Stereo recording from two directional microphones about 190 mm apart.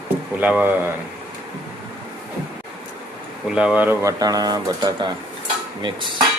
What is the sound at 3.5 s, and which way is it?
Speech, 5° right (ahead or behind).